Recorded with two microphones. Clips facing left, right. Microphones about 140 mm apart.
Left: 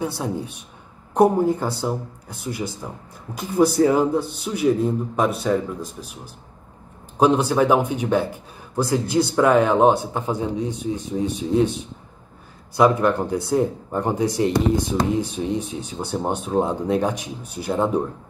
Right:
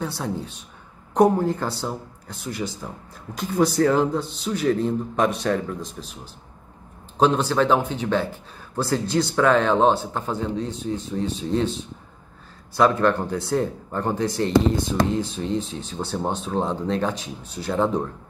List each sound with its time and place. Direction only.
0.0 s speech: 10° left (ahead or behind)
12.7 s speech: 15° left (ahead or behind)